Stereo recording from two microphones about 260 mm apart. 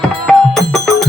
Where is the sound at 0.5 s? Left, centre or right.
Centre.